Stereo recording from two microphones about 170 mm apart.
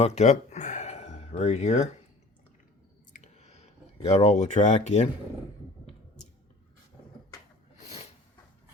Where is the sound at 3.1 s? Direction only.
40° left (ahead or behind).